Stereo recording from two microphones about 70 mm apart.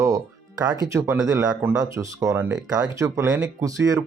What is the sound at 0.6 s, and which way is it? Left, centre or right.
Speech, right.